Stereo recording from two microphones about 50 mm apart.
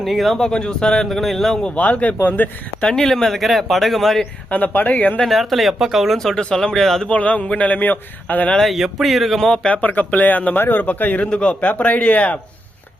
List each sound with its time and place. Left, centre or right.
0.0 s speech: centre
0.3 s speech: centre
1.1 s speech: centre
1.6 s speech: left
2.8 s speech: centre
4.4 s speech: left
5.2 s speech: centre
6.1 s speech: centre
7.1 s speech: left
8.6 s speech: centre
9.7 s speech: left
11.3 s speech: left